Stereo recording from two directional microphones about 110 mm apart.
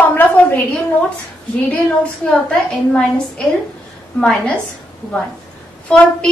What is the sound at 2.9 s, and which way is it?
A woman's voice, 10° left (ahead or behind).